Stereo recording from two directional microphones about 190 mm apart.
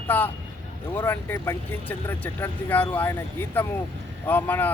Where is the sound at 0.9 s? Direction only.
10° left (ahead or behind).